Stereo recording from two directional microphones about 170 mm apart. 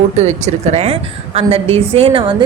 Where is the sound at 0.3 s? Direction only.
40° right (ahead or behind).